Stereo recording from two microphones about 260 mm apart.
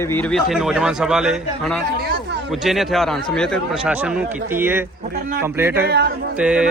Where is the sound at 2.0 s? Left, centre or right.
Right.